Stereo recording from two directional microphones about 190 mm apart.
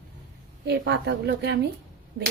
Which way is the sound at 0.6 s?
60° right (ahead or behind).